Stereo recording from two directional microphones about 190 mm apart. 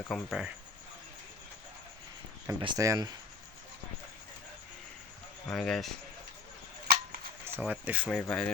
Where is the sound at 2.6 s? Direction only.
20° right (ahead or behind).